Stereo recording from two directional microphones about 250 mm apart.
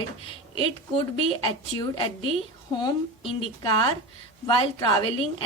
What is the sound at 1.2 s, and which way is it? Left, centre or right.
A woman's voice, centre.